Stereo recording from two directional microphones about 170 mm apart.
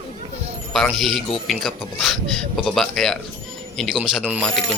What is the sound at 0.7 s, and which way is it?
A man's voice, centre (ahead or behind).